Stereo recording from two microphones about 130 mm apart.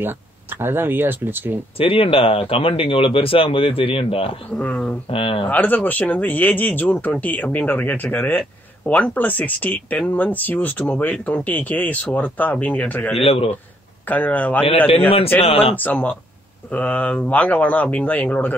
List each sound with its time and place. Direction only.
0.6 s speech: 15° right (ahead or behind)
1.8 s speech: 45° left (ahead or behind)
4.6 s speech: 10° left (ahead or behind)
5.1 s speech: 45° left (ahead or behind)
5.5 s speech: 15° left (ahead or behind)
13.2 s speech: 45° left (ahead or behind)
14.0 s speech: 10° left (ahead or behind)
15.4 s speech: 50° left (ahead or behind)
15.7 s speech: 15° left (ahead or behind)